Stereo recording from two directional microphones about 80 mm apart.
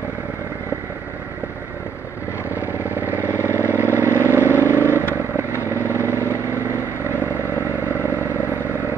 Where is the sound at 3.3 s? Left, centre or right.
Right.